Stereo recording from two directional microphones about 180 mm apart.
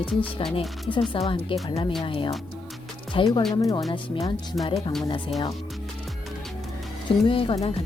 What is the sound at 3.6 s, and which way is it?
Speech, 20° left (ahead or behind).